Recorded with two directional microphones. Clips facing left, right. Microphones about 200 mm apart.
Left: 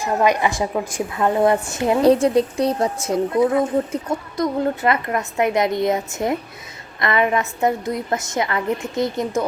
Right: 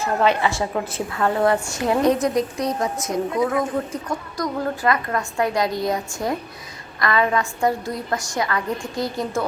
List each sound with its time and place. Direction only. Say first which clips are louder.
0.0 s a woman's voice: left 1 dB; 15° left (ahead or behind)